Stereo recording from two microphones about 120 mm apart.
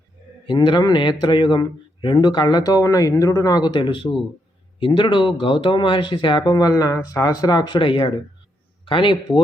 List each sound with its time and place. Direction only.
0.4 s a man's voice: 40° left (ahead or behind)